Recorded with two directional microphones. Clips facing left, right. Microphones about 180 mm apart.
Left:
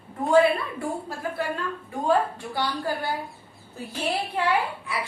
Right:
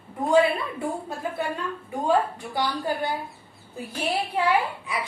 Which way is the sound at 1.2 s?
20° right (ahead or behind).